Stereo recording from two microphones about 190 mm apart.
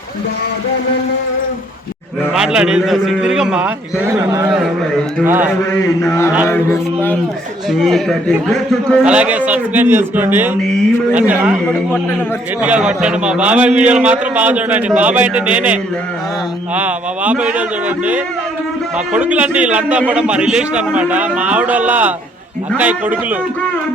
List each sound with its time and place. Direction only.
2.3 s a man's voice: 5° right (ahead or behind)
4.0 s a man's voice: 15° right (ahead or behind)
6.5 s mantra: 10° left (ahead or behind)
7.7 s a man's voice: centre (ahead or behind)
12.6 s a man's voice: 5° right (ahead or behind)